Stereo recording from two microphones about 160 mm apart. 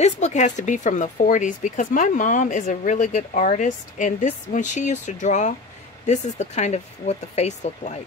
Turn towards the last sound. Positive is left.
turn(degrees=45)  # may be behind; listen again after turning